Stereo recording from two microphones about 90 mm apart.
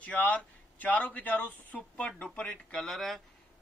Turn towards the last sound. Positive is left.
turn(degrees=0)  # may be behind; listen again after turning